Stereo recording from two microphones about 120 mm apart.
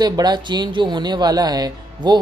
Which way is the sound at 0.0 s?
35° right (ahead or behind).